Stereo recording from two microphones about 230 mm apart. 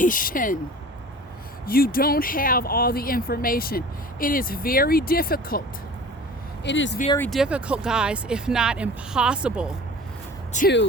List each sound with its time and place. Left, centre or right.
0.0 s speech: left
1.6 s speech: left
6.7 s speech: left
7.2 s speech: centre
10.5 s speech: left